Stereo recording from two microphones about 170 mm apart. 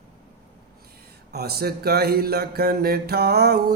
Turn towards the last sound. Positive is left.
turn(degrees=-70)  # may be behind; listen again after turning